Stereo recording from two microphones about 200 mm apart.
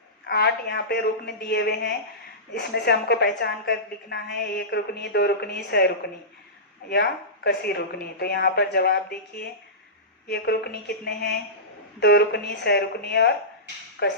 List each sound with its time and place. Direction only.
0.3 s a woman's voice: 55° left (ahead or behind)
6.9 s a woman's voice: 55° left (ahead or behind)
10.2 s a woman's voice: 55° left (ahead or behind)